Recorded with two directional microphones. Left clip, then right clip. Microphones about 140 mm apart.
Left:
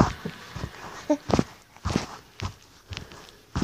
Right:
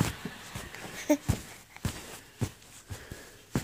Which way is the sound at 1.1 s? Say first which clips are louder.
Left 2 dB; 35° right (ahead or behind).